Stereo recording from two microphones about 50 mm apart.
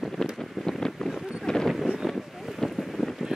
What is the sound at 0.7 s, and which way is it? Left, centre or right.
Wind noise, centre.